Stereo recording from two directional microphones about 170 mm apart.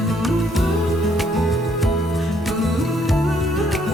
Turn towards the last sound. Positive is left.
turn(degrees=0)  # may be behind; listen again after turning